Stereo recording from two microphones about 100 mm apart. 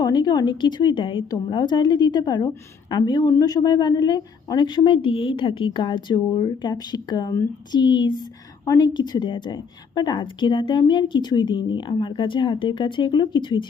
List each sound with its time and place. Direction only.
0.0 s a woman's voice: 40° left (ahead or behind)